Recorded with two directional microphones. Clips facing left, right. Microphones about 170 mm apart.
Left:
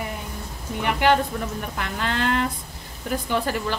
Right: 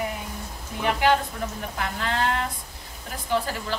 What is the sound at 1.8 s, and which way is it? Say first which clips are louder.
Speech: even; 65° left (ahead or behind).